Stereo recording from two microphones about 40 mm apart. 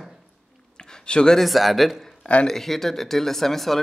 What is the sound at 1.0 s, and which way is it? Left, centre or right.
Speech, left.